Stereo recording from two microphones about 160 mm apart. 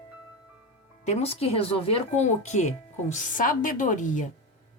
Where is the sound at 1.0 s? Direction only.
45° left (ahead or behind).